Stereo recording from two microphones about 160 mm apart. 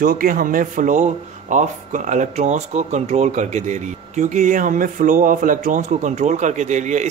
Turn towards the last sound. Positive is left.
turn(degrees=-50)  # may be behind; listen again after turning